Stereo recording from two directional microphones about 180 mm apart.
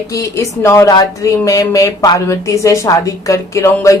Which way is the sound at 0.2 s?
15° left (ahead or behind).